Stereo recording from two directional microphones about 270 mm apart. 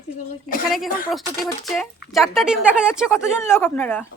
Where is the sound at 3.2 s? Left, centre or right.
Centre.